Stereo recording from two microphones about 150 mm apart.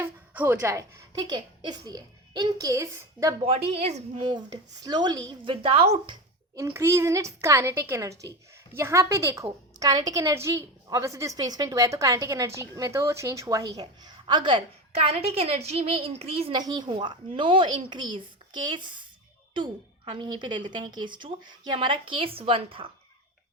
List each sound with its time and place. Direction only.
0.0 s a woman's voice: 15° right (ahead or behind)
3.4 s speech: 40° right (ahead or behind)
4.2 s speech: 30° right (ahead or behind)
6.6 s a woman's voice: 15° right (ahead or behind); by 16.6 s 40° right (ahead or behind)
16.6 s speech: 30° right (ahead or behind)